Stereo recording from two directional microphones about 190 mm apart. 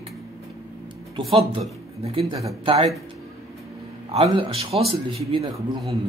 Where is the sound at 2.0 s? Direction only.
30° right (ahead or behind).